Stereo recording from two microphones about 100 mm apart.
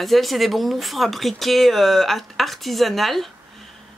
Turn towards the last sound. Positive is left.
turn(degrees=0)  # may be behind; listen again after turning